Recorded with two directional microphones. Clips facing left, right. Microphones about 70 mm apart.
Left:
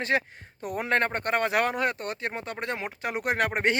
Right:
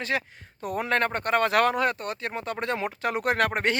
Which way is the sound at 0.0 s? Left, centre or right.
Left.